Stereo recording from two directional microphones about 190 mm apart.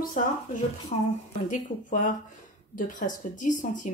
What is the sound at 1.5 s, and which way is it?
A woman's voice, 40° left (ahead or behind).